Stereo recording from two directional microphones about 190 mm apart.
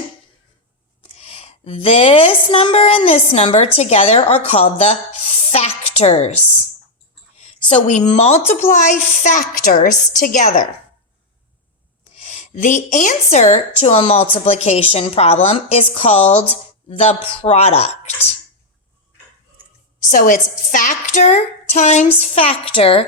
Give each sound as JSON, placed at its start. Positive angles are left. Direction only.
{"t": 1.0, "sound": "a woman's voice", "side_deg": 30}
{"t": 7.3, "sound": "a sound", "side_deg": 30}
{"t": 8.1, "sound": "a woman's voice", "side_deg": 35}
{"t": 12.1, "sound": "a woman's voice", "side_deg": 35}
{"t": 20.1, "sound": "a woman's voice", "side_deg": 45}